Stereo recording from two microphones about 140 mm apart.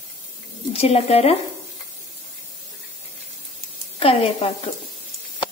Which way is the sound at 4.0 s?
45° left (ahead or behind).